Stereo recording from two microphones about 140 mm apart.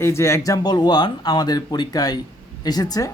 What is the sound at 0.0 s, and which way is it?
Speech, 20° left (ahead or behind).